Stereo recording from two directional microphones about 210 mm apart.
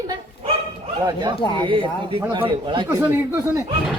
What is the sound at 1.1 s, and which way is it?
Speech, 20° right (ahead or behind).